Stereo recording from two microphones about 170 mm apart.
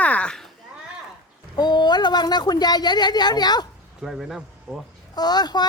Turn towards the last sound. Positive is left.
turn(degrees=25)  # may be behind; listen again after turning